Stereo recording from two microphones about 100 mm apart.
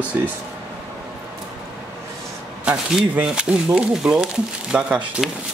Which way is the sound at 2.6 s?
15° right (ahead or behind).